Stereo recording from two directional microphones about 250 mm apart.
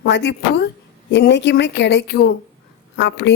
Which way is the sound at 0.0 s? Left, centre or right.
Left.